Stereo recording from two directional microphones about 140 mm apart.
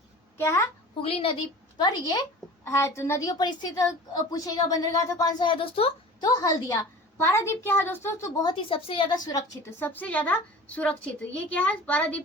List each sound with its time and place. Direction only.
0.3 s a woman's voice: 20° left (ahead or behind)
1.0 s a woman's voice: 40° left (ahead or behind)
1.8 s a woman's voice: 25° left (ahead or behind)
6.2 s a woman's voice: 25° left (ahead or behind)
9.6 s a woman's voice: 15° left (ahead or behind)